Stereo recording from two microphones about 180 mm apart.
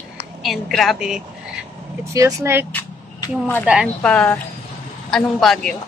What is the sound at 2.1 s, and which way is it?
Speech, 20° right (ahead or behind).